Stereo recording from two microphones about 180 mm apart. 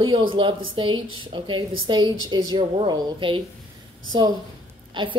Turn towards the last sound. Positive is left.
turn(degrees=-25)  # may be behind; listen again after turning